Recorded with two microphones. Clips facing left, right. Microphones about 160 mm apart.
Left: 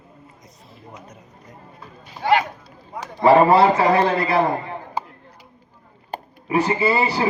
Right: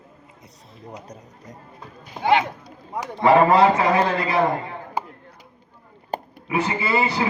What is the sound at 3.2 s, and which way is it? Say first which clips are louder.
A man's voice: left 2 dB; 30° left (ahead or behind).